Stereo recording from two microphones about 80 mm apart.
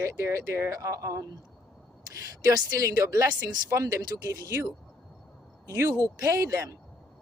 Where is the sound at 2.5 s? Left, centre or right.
Right.